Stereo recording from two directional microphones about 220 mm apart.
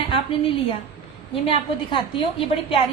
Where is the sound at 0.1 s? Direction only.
25° left (ahead or behind).